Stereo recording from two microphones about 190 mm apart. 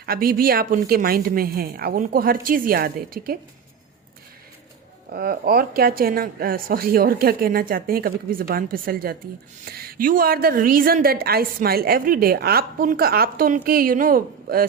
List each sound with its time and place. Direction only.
0.0 s a woman's voice: 50° right (ahead or behind)
5.1 s a woman's voice: 50° right (ahead or behind)